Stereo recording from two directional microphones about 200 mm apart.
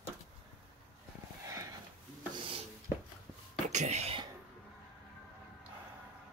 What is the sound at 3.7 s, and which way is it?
Whispering, 35° right (ahead or behind).